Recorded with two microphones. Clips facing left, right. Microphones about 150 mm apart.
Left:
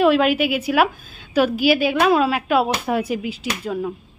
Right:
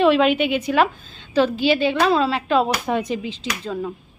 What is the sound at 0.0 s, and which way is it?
A woman's voice, 5° left (ahead or behind).